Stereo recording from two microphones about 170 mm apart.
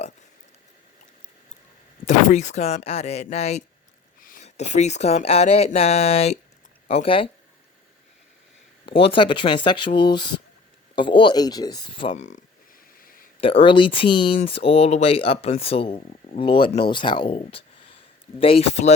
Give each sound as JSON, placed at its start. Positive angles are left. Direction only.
{"t": 2.0, "sound": "speech", "side_deg": 45}
{"t": 4.2, "sound": "a sound", "side_deg": 55}
{"t": 4.4, "sound": "speech", "side_deg": 40}
{"t": 8.9, "sound": "speech", "side_deg": 30}
{"t": 12.1, "sound": "speech", "side_deg": 45}
{"t": 13.0, "sound": "a sound", "side_deg": 55}
{"t": 13.4, "sound": "speech", "side_deg": 30}